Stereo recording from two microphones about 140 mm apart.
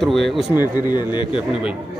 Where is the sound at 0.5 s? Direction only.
30° left (ahead or behind).